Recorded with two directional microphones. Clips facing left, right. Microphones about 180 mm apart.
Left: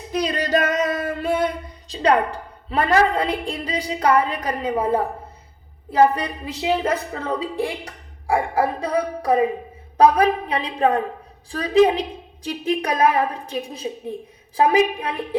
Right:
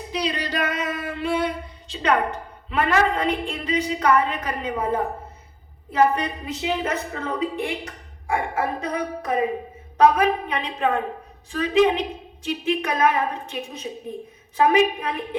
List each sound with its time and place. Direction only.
0.1 s singing: 45° left (ahead or behind)
1.9 s a woman's voice: 35° left (ahead or behind)